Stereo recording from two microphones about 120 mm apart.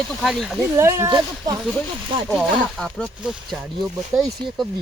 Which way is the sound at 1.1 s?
35° right (ahead or behind).